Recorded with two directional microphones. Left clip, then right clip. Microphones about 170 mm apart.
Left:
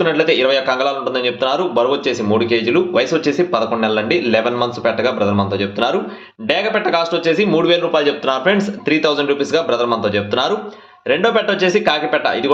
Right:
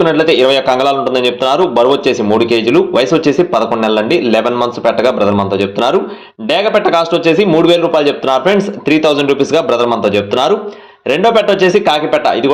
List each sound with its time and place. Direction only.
0.0 s a man's voice: 30° right (ahead or behind)